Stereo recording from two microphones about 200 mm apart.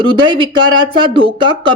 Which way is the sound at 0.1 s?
25° right (ahead or behind).